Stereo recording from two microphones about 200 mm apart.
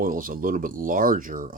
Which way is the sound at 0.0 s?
45° right (ahead or behind).